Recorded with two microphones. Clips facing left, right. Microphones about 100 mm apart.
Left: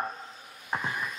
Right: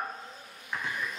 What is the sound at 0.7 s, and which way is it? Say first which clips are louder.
Speech: left 4 dB; 35° left (ahead or behind).